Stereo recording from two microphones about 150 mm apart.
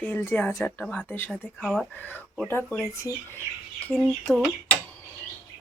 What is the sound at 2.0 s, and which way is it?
Speech, 10° left (ahead or behind).